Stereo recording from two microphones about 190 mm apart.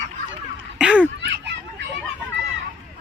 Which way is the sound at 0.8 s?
5° right (ahead or behind).